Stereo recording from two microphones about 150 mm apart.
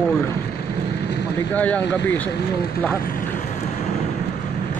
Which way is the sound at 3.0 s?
75° left (ahead or behind).